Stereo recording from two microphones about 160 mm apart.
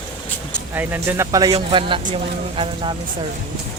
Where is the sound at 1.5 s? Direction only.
35° right (ahead or behind).